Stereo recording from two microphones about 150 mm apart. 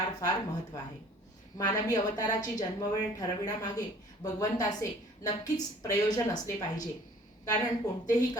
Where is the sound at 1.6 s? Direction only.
25° left (ahead or behind).